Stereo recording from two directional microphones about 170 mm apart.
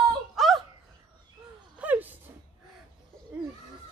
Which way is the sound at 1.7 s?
10° right (ahead or behind).